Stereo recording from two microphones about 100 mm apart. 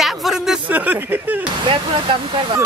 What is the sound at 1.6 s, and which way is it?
Speech, 55° right (ahead or behind).